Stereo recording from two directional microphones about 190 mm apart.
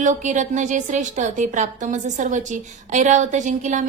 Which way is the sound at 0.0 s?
40° right (ahead or behind).